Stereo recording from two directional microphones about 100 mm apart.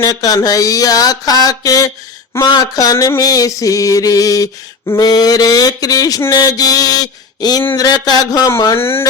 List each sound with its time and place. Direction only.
0.0 s mantra: 40° left (ahead or behind); by 9.0 s 25° left (ahead or behind)